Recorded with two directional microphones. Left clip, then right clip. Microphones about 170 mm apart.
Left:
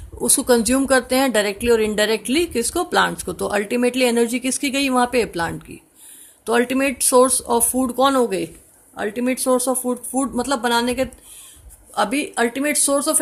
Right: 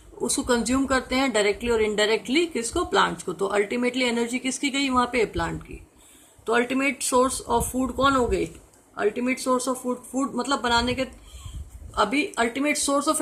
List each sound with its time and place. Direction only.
0.2 s speech: 45° left (ahead or behind)